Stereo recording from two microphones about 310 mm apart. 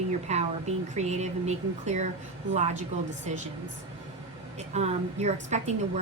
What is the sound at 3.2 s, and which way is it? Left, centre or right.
Speech, right.